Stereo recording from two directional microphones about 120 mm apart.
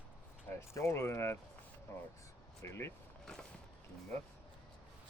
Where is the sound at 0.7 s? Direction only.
20° left (ahead or behind).